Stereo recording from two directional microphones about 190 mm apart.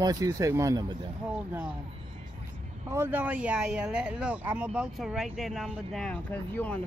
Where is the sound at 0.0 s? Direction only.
20° right (ahead or behind).